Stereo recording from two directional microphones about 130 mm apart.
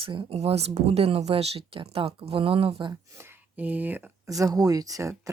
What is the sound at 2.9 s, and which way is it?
Speech, 20° right (ahead or behind).